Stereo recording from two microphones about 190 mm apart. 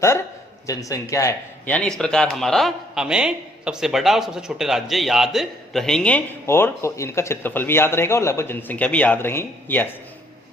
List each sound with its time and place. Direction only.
0.7 s speech: 15° left (ahead or behind)